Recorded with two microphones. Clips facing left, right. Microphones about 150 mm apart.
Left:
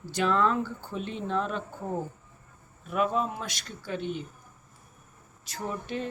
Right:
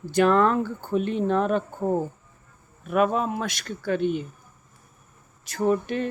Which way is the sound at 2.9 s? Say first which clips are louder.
Right 5 dB; 65° right (ahead or behind).